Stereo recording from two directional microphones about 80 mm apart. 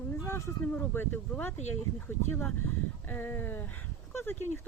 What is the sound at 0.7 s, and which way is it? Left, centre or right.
Speech, left.